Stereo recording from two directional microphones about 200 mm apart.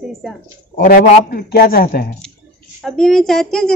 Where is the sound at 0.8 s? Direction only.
45° left (ahead or behind).